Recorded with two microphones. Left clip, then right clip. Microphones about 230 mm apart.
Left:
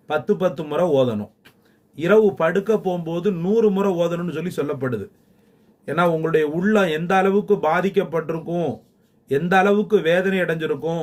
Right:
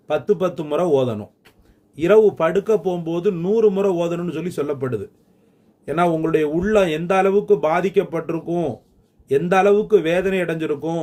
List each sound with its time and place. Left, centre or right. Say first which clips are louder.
0.1 s a man's voice: right 1 dB; centre